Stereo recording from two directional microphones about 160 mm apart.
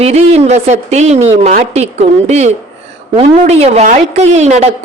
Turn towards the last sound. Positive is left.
turn(degrees=-45)  # may be behind; listen again after turning